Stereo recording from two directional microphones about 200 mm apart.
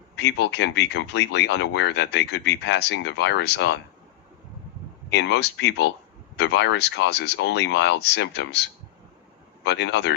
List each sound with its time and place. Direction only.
0.2 s speech: 60° left (ahead or behind)
5.1 s speech: 60° left (ahead or behind)
9.6 s speech: 60° left (ahead or behind)